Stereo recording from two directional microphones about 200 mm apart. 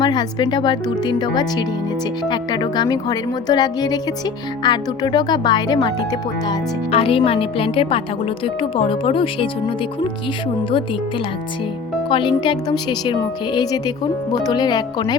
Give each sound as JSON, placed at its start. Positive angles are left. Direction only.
{"t": 0.0, "sound": "speech", "side_deg": 20}
{"t": 12.0, "sound": "speech", "side_deg": 25}